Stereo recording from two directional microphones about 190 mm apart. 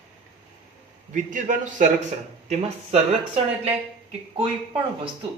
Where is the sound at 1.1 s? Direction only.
40° right (ahead or behind).